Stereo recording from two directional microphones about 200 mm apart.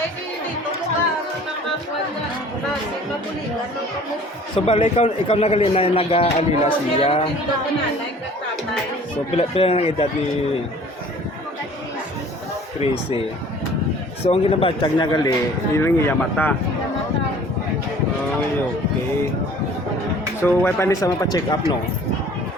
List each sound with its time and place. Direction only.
4.5 s a man's voice: 25° left (ahead or behind)
9.3 s a man's voice: 30° left (ahead or behind)
12.8 s a man's voice: 30° left (ahead or behind)
14.3 s a man's voice: 25° left (ahead or behind); by 16.6 s 10° left (ahead or behind)
20.4 s speech: 10° left (ahead or behind)